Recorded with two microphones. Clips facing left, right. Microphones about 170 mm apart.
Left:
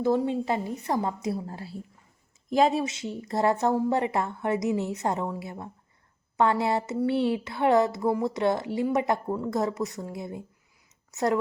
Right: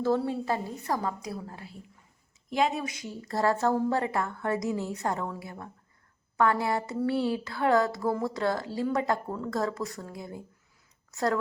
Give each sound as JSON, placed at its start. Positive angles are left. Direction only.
{"t": 0.0, "sound": "a woman's voice", "side_deg": 15}